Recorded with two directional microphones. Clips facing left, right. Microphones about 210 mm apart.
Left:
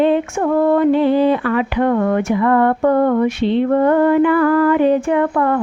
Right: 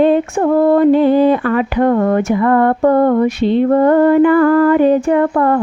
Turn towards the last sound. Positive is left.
turn(degrees=-40)  # may be behind; listen again after turning